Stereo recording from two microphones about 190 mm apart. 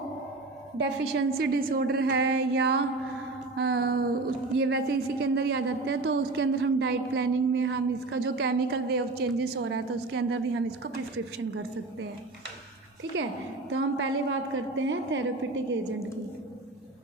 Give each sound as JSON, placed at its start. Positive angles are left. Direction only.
{"t": 0.8, "sound": "a woman's voice", "side_deg": -65}
{"t": 13.7, "sound": "a woman's voice", "side_deg": -90}